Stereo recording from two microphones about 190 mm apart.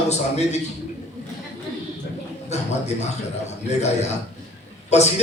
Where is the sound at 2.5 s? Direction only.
35° left (ahead or behind).